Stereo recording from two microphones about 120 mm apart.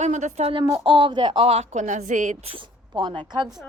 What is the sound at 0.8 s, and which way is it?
A woman's voice, 45° right (ahead or behind).